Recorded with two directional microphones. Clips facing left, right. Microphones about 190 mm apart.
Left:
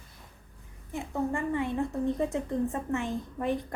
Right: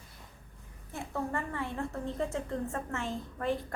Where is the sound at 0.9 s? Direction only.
15° left (ahead or behind).